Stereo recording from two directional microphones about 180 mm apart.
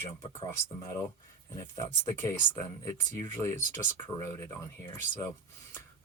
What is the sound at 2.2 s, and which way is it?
Speech, 15° left (ahead or behind).